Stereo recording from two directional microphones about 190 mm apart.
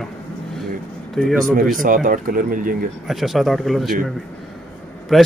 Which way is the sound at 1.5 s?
45° right (ahead or behind).